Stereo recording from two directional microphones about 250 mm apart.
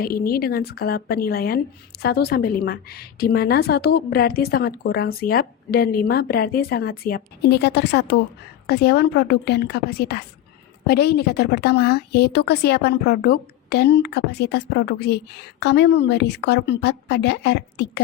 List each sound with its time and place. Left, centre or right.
0.0 s a woman's voice: left